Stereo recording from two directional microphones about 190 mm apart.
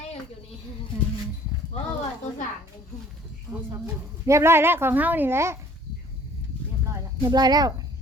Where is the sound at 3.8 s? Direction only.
15° right (ahead or behind).